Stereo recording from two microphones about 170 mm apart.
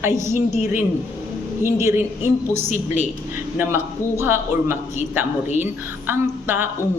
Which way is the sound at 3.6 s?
15° right (ahead or behind).